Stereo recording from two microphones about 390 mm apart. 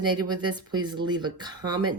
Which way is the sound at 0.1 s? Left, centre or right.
Centre.